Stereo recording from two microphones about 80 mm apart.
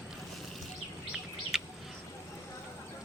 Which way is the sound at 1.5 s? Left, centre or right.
Centre.